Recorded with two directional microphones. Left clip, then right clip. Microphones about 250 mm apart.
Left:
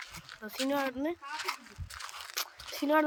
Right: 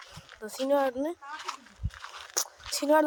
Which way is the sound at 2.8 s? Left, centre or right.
Right.